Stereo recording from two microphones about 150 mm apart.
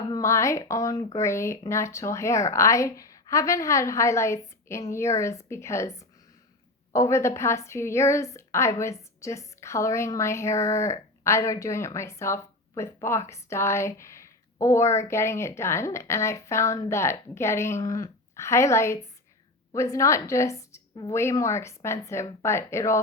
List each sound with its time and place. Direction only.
0.1 s a woman's voice: 20° left (ahead or behind)